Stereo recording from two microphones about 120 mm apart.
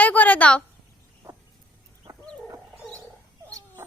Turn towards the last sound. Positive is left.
turn(degrees=-25)  # may be behind; listen again after turning